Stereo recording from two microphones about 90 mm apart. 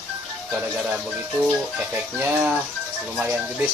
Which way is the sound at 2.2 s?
20° right (ahead or behind).